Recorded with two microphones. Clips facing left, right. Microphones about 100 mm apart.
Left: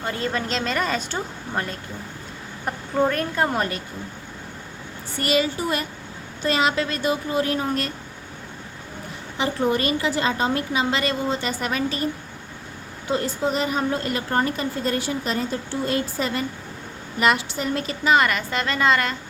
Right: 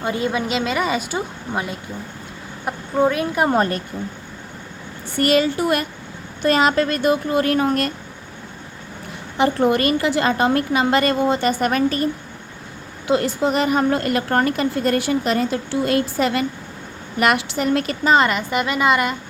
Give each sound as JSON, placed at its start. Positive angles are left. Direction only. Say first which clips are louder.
{"t": 0.0, "sound": "a woman's voice", "louder": "right 4 dB", "side_deg": -15}
{"t": 3.5, "sound": "a woman's voice", "louder": "right 6 dB", "side_deg": -35}
{"t": 5.1, "sound": "a woman's voice", "louder": "right 5 dB", "side_deg": -55}
{"t": 6.4, "sound": "a woman's voice", "louder": "right 5 dB", "side_deg": -45}
{"t": 9.4, "sound": "a woman's voice", "louder": "right 5 dB", "side_deg": -60}
{"t": 13.1, "sound": "a woman's voice", "louder": "right 5 dB", "side_deg": -70}
{"t": 18.0, "sound": "a woman's voice", "louder": "right 2 dB", "side_deg": -35}
{"t": 18.3, "sound": "a woman's voice", "louder": "right 4 dB", "side_deg": -20}